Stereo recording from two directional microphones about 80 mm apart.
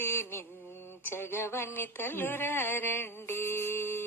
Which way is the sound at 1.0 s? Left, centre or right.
Left.